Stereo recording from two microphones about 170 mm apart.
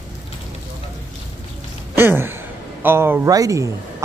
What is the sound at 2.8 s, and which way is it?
Speech, 15° right (ahead or behind).